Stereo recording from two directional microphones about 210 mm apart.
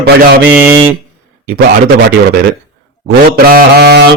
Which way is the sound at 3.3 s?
45° right (ahead or behind).